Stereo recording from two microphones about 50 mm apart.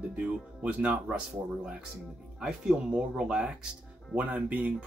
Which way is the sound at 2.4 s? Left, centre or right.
Centre.